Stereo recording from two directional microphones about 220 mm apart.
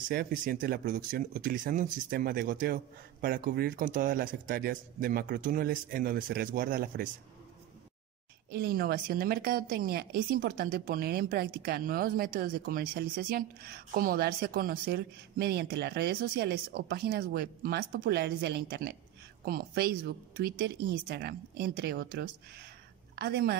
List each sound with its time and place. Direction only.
0.1 s speech: 40° right (ahead or behind)
8.5 s a woman's voice: 45° right (ahead or behind)